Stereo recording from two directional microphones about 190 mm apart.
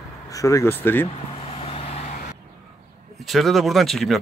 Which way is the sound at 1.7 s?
30° left (ahead or behind).